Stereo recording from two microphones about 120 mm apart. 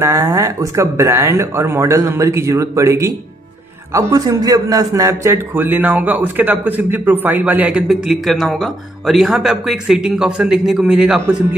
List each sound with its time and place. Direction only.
0.0 s a man's voice: 25° right (ahead or behind); by 11.1 s 5° right (ahead or behind)